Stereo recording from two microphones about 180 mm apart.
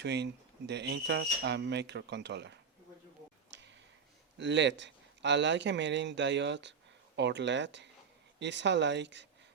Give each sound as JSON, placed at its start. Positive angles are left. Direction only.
{"t": 0.0, "sound": "speech", "side_deg": -70}
{"t": 3.5, "sound": "a sound", "side_deg": -75}
{"t": 4.4, "sound": "speech", "side_deg": -80}